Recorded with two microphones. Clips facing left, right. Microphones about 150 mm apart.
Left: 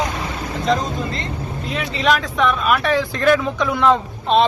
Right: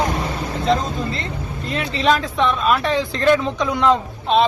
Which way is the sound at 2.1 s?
30° right (ahead or behind).